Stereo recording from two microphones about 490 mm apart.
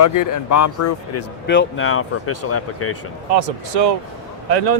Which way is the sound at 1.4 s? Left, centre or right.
Left.